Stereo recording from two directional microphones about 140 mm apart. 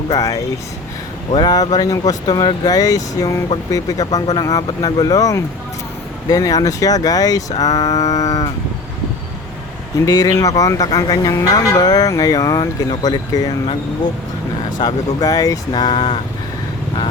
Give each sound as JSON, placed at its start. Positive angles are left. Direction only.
{"t": 0.1, "sound": "speech", "side_deg": 25}
{"t": 10.1, "sound": "speech", "side_deg": 25}
{"t": 14.8, "sound": "speech", "side_deg": 25}